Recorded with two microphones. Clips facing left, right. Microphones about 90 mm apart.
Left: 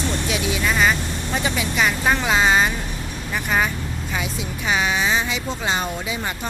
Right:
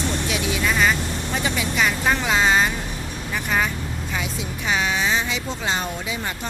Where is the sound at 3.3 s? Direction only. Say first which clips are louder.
Left 2 dB; 15° left (ahead or behind).